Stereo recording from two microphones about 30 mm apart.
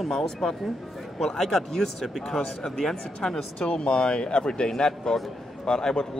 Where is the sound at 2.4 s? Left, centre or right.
Left.